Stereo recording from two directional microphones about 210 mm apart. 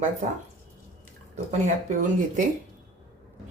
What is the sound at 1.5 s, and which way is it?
Speech, 35° right (ahead or behind).